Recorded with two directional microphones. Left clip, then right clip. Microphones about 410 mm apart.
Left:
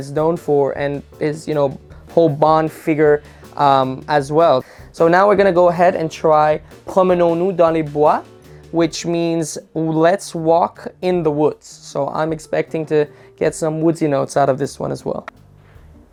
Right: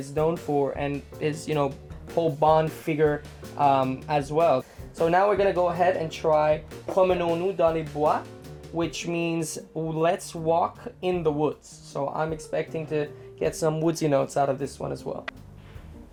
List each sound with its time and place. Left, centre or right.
0.0 s speech: left
2.1 s speech: left
13.8 s speech: left